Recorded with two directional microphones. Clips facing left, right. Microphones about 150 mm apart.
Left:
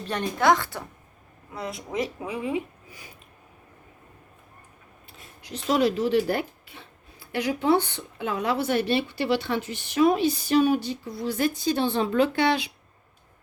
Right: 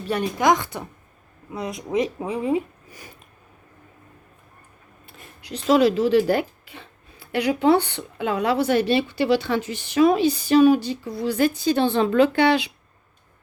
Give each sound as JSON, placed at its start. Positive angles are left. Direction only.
{"t": 0.1, "sound": "a woman's voice", "side_deg": -10}
{"t": 2.2, "sound": "speech", "side_deg": -35}
{"t": 5.0, "sound": "a sound", "side_deg": -55}
{"t": 5.5, "sound": "a woman's voice", "side_deg": -90}